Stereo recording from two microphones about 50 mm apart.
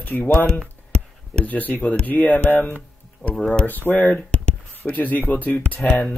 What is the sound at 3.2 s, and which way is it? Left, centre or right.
Speech, left.